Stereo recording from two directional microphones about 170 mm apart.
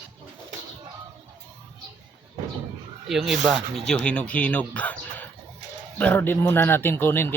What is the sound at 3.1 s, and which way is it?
A man's voice, centre (ahead or behind).